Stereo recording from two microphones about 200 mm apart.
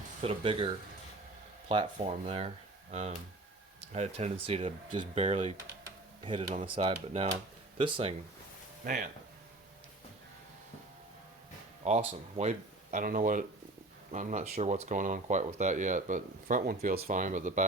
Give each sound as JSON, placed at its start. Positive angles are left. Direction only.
{"t": 0.2, "sound": "speech", "side_deg": -25}
{"t": 3.9, "sound": "speech", "side_deg": -35}
{"t": 11.9, "sound": "speech", "side_deg": -35}